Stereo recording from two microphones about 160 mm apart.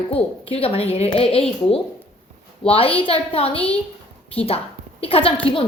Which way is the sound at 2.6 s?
35° left (ahead or behind).